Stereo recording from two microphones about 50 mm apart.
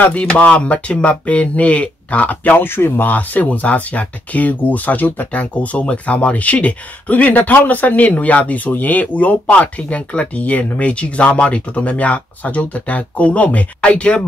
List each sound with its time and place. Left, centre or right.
0.0 s speech: left
2.6 s speech: left
5.3 s speech: left